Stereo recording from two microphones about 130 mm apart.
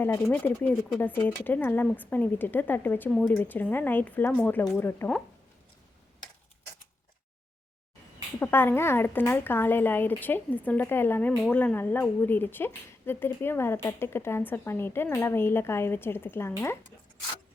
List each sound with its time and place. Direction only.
0.0 s a woman's voice: 15° left (ahead or behind)
8.4 s a woman's voice: 15° left (ahead or behind)